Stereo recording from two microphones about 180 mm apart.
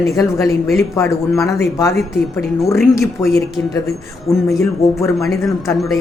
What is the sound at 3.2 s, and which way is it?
Speech, 15° left (ahead or behind).